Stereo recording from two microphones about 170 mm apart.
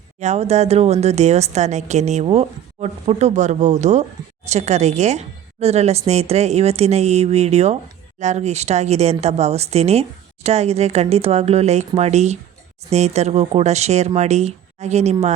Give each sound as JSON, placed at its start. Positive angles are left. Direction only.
{"t": 0.2, "sound": "speech", "side_deg": -40}